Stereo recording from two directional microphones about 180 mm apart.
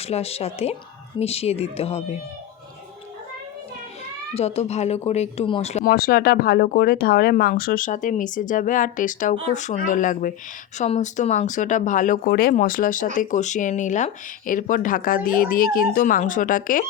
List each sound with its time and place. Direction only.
0.0 s speech: 35° left (ahead or behind)
4.4 s speech: 35° left (ahead or behind)
5.8 s speech: 60° left (ahead or behind)